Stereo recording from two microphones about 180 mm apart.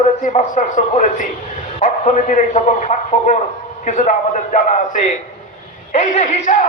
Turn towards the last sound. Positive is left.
turn(degrees=40)  # may be behind; listen again after turning